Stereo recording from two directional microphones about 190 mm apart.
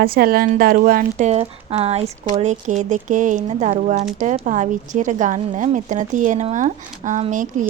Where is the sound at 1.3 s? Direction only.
35° right (ahead or behind).